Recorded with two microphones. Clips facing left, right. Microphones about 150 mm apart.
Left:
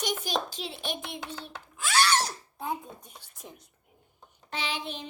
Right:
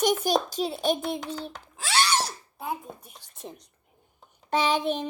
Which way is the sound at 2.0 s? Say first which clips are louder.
Even; 15° right (ahead or behind).